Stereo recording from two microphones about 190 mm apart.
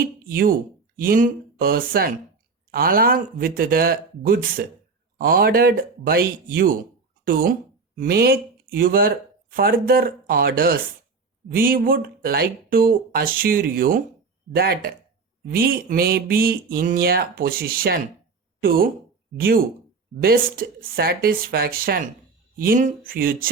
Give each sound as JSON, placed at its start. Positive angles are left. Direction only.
{"t": 0.0, "sound": "a sound", "side_deg": -50}
{"t": 0.9, "sound": "speech", "side_deg": -50}
{"t": 7.9, "sound": "speech", "side_deg": -50}
{"t": 20.2, "sound": "speech", "side_deg": -50}